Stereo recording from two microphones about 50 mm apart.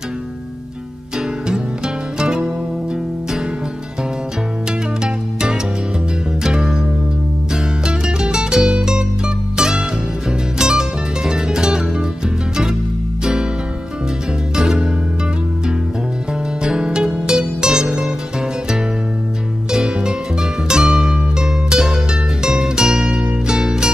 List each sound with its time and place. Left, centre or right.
2.1 s music: centre
5.0 s music: centre
7.8 s music: centre
10.6 s music: centre
13.2 s music: centre
14.5 s music: centre
16.6 s music: centre
19.7 s music: centre